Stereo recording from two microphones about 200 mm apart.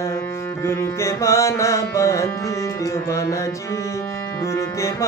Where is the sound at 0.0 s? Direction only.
15° left (ahead or behind).